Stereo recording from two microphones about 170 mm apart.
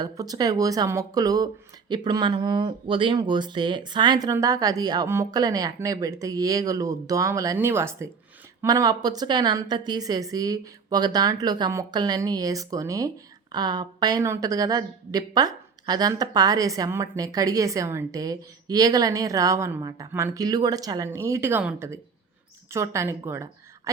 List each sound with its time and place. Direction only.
0.0 s a woman's voice: 20° right (ahead or behind)